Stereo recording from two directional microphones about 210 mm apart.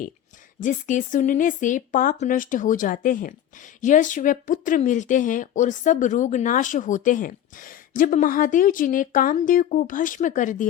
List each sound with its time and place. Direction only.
0.6 s speech: 35° left (ahead or behind)